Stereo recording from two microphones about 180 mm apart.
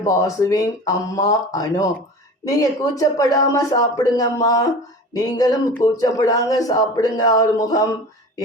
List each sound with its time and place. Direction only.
0.0 s speech: 20° left (ahead or behind)